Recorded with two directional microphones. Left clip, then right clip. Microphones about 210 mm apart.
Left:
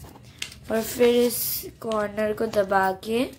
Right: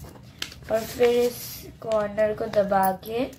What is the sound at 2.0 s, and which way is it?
Speech, 30° left (ahead or behind).